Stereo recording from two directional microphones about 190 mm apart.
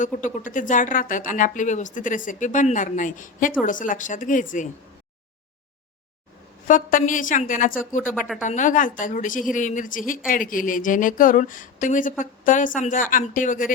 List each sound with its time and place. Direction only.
0.0 s speech: 45° left (ahead or behind)
6.7 s speech: 45° left (ahead or behind)